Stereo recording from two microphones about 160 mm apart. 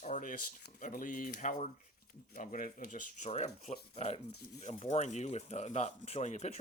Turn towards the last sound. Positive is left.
turn(degrees=45)  # may be behind; listen again after turning